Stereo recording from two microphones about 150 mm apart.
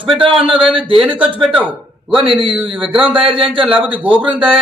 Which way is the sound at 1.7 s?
35° right (ahead or behind).